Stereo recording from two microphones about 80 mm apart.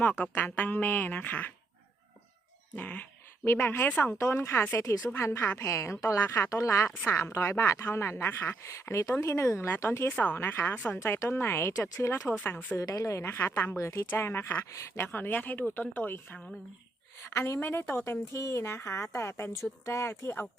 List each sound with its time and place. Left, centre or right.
0.0 s speech: centre
2.7 s speech: centre
4.2 s speech: left
12.4 s speech: left
12.7 s speech: left